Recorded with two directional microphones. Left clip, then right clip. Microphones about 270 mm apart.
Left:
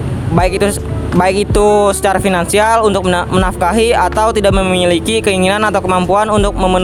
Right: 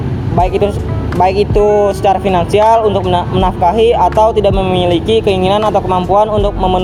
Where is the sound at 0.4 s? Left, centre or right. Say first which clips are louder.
Left 1 dB; left.